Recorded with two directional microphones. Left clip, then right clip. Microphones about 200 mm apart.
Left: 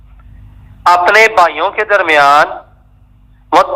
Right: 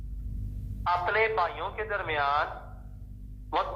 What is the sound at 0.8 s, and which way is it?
A man's voice, 40° left (ahead or behind).